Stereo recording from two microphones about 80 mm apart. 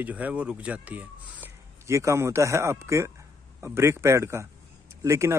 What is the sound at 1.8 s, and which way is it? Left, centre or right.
Speech, right.